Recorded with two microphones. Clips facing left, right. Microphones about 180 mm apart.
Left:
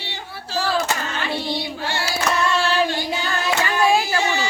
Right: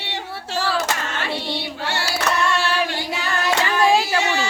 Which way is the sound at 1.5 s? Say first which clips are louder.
Left 1 dB; 70° right (ahead or behind).